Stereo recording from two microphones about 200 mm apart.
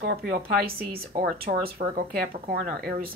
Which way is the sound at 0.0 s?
50° right (ahead or behind).